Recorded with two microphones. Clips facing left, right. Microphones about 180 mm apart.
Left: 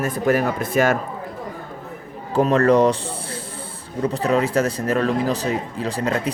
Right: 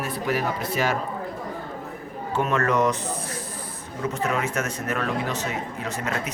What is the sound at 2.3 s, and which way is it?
A man's voice, 35° left (ahead or behind).